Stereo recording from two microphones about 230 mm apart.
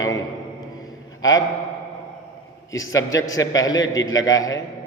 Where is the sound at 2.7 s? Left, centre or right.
Centre.